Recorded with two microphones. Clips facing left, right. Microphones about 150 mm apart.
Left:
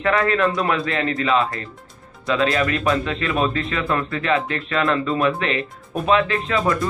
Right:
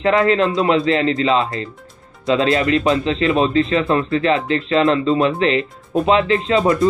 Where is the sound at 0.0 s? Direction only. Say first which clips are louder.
Right 4 dB; 25° right (ahead or behind).